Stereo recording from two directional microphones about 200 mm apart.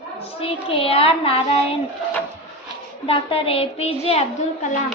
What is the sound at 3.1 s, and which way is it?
A woman's voice, 30° left (ahead or behind).